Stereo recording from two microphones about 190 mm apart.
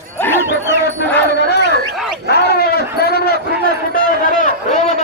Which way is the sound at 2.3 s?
55° left (ahead or behind).